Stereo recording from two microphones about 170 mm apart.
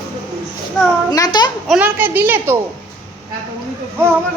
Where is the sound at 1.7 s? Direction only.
10° right (ahead or behind).